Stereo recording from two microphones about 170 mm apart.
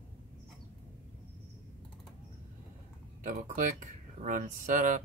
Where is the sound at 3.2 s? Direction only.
50° right (ahead or behind).